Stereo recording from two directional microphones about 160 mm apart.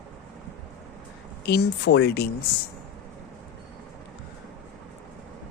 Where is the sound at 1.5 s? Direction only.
90° left.